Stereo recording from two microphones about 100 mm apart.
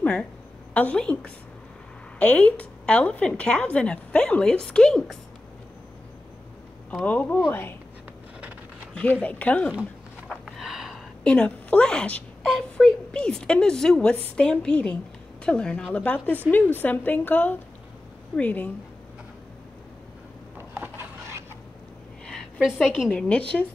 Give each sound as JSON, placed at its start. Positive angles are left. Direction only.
{"t": 0.0, "sound": "a woman's voice", "side_deg": 15}
{"t": 7.1, "sound": "a woman's voice", "side_deg": 15}
{"t": 8.9, "sound": "a woman's voice", "side_deg": 15}
{"t": 10.6, "sound": "a sound", "side_deg": -5}
{"t": 11.2, "sound": "a woman's voice", "side_deg": 10}
{"t": 20.5, "sound": "a sound", "side_deg": -20}
{"t": 22.2, "sound": "a sound", "side_deg": 5}
{"t": 22.7, "sound": "a woman's voice", "side_deg": -5}
{"t": 23.1, "sound": "a woman's voice", "side_deg": 10}